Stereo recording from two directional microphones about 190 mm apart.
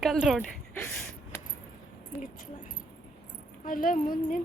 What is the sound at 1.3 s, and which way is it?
Keys jangling, 10° left (ahead or behind).